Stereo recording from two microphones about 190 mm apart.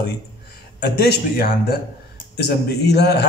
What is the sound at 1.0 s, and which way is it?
A man's voice, 55° left (ahead or behind).